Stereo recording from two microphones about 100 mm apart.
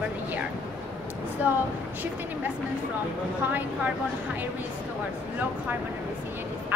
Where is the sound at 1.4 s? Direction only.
15° right (ahead or behind).